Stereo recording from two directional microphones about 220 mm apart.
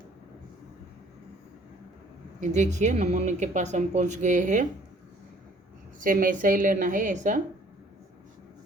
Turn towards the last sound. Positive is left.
turn(degrees=-35)  # may be behind; listen again after turning